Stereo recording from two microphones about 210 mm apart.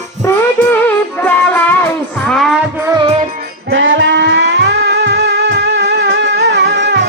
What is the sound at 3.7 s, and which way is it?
Music, 65° right (ahead or behind).